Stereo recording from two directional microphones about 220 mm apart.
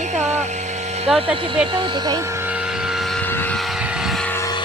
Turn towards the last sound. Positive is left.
turn(degrees=15)  # may be behind; listen again after turning